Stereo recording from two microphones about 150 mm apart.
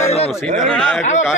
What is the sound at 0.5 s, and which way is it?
Speech, 5° left (ahead or behind).